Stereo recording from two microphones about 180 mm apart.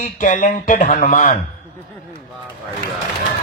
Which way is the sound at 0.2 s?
45° left (ahead or behind).